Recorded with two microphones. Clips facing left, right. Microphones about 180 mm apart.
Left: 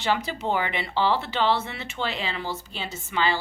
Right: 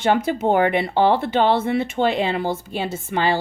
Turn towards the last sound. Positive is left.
turn(degrees=-50)  # may be behind; listen again after turning